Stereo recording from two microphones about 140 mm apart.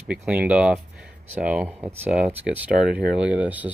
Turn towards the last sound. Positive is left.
turn(degrees=-10)  # may be behind; listen again after turning